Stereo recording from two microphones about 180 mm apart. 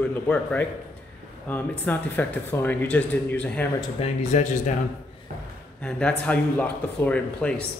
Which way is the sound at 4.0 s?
40° left (ahead or behind).